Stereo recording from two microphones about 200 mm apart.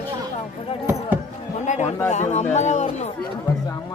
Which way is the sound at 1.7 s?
35° left (ahead or behind).